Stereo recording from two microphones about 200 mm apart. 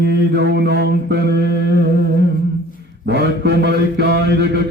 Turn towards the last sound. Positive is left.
turn(degrees=-55)  # may be behind; listen again after turning